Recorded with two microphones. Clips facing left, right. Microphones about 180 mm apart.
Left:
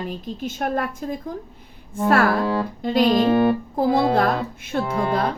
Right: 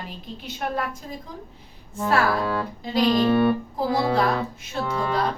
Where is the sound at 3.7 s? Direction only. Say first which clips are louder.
Left 4 dB; 55° left (ahead or behind).